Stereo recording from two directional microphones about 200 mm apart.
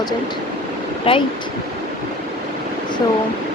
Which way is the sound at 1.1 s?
25° left (ahead or behind).